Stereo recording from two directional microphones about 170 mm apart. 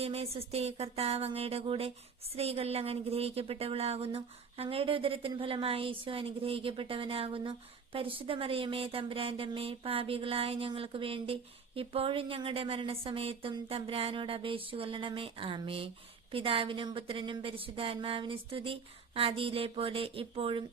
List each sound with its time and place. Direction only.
0.0 s speech: 35° right (ahead or behind)